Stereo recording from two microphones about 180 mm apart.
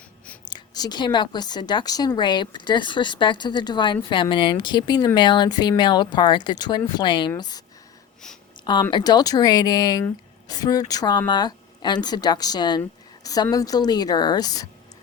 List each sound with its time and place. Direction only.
0.5 s speech: 20° left (ahead or behind)
8.6 s speech: 25° left (ahead or behind)